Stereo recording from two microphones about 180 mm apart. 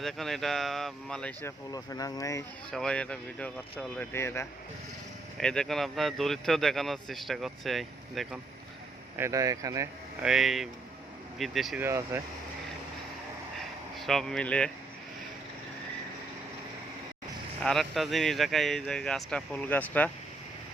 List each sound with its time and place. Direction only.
0.0 s speech: centre (ahead or behind); by 2.4 s 20° left (ahead or behind)
2.7 s speech: 5° left (ahead or behind)
9.1 s speech: 15° right (ahead or behind)
10.2 s speech: centre (ahead or behind)
11.8 s speech: 15° right (ahead or behind)
14.0 s speech: centre (ahead or behind)
17.6 s speech: 5° left (ahead or behind)